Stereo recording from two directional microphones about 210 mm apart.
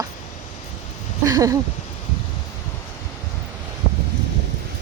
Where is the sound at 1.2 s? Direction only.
15° right (ahead or behind).